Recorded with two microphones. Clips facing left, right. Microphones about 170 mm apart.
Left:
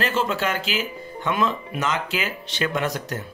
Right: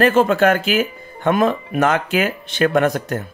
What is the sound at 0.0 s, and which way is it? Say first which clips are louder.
Speech: right 10 dB; 55° right (ahead or behind).